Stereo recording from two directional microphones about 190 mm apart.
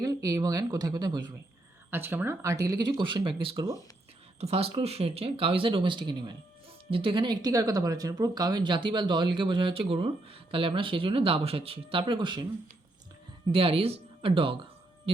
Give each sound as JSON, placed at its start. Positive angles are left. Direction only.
{"t": 0.0, "sound": "speech", "side_deg": -20}
{"t": 4.4, "sound": "speech", "side_deg": -30}
{"t": 13.5, "sound": "speech", "side_deg": -30}